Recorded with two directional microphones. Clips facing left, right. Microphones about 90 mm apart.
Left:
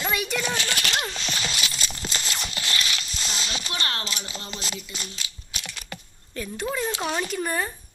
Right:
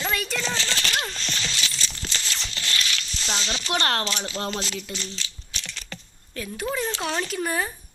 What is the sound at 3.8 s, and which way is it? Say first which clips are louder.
Speech: right 6 dB; 50° right (ahead or behind).